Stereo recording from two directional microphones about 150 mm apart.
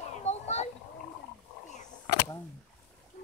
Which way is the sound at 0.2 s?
50° left (ahead or behind).